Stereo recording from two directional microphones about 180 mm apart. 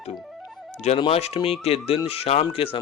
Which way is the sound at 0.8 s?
35° left (ahead or behind).